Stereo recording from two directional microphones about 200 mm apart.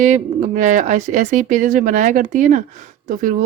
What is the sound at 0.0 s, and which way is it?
A woman's voice, 40° right (ahead or behind).